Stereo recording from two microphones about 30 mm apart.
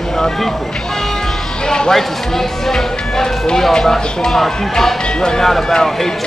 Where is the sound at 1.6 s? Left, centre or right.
Left.